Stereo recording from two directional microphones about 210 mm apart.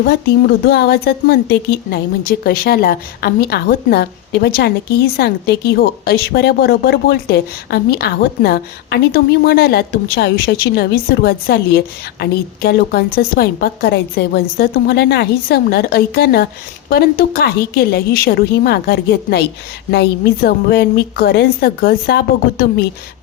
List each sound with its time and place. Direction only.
0.0 s a woman's voice: 50° left (ahead or behind)